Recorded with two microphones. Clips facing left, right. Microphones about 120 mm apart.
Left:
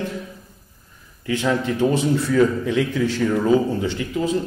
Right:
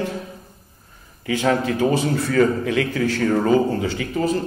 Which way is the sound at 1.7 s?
65° right (ahead or behind).